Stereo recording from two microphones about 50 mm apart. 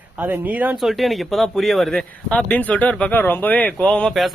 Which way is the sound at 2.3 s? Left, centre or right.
Left.